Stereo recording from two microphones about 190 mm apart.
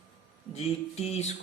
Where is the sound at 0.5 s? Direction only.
35° left (ahead or behind).